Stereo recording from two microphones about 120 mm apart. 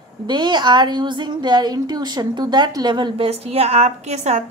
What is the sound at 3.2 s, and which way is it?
A woman's voice, 55° right (ahead or behind).